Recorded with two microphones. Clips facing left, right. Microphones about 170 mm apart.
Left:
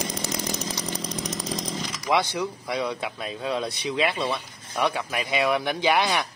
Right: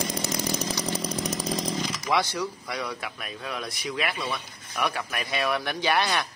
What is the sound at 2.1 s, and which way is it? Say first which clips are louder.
A man's voice: left 3 dB; 20° left (ahead or behind).